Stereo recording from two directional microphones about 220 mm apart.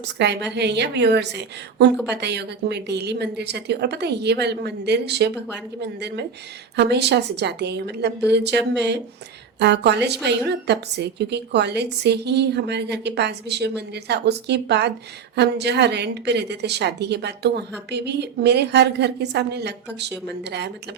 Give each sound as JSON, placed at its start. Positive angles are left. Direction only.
{"t": 0.0, "sound": "a woman's voice", "side_deg": -50}